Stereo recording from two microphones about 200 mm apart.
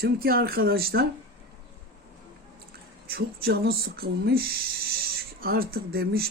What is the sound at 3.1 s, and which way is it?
Speech, 50° right (ahead or behind).